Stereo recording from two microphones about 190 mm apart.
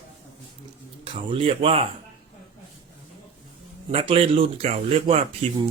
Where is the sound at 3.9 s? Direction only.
30° right (ahead or behind).